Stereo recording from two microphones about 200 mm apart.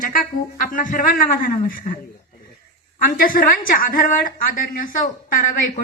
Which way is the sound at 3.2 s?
45° left (ahead or behind).